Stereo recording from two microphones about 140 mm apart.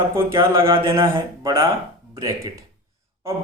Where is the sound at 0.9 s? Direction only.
35° right (ahead or behind).